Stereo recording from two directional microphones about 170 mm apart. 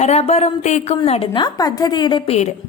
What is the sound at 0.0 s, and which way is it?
A woman's voice, 40° left (ahead or behind).